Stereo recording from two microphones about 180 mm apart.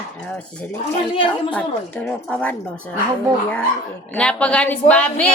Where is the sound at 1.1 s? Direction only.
30° left (ahead or behind).